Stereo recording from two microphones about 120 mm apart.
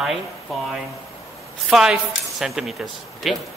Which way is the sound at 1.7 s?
5° right (ahead or behind).